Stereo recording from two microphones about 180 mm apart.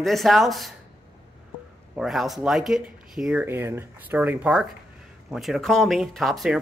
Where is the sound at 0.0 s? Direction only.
Centre (ahead or behind).